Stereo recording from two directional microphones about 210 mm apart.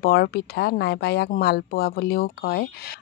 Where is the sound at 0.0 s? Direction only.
50° left (ahead or behind).